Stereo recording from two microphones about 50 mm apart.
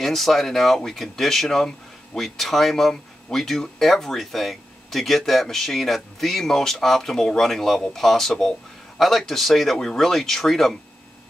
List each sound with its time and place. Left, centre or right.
0.0 s speech: centre